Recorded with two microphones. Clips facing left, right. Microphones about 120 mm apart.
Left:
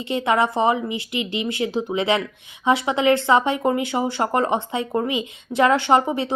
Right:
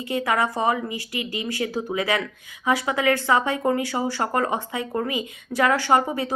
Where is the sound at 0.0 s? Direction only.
25° left (ahead or behind).